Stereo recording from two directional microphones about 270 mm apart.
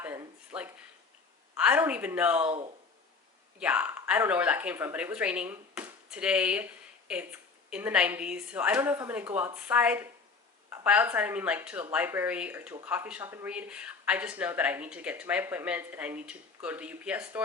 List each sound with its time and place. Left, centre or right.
0.0 s a sound: centre
1.5 s speech: centre
2.5 s speech: centre
3.6 s speech: centre